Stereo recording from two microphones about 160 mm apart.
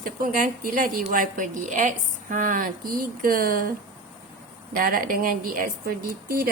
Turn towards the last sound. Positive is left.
turn(degrees=-65)  # may be behind; listen again after turning